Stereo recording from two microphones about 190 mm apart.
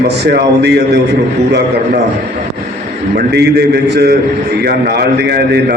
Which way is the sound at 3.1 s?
60° right (ahead or behind).